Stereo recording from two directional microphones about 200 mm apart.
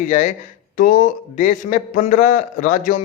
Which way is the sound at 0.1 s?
35° left (ahead or behind).